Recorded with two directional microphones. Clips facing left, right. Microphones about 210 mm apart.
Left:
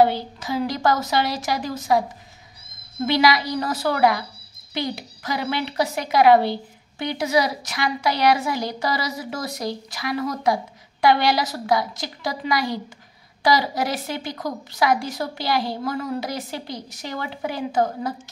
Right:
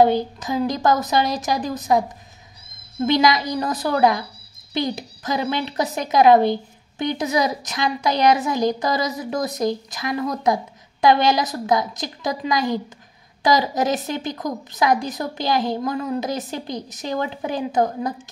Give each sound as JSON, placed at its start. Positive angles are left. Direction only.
{"t": 0.0, "sound": "a woman's voice", "side_deg": -15}
{"t": 3.1, "sound": "a woman's voice", "side_deg": -20}